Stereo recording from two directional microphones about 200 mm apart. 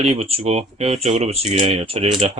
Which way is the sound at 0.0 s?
30° right (ahead or behind).